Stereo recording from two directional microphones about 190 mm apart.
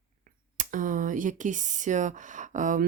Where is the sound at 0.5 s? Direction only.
45° right (ahead or behind).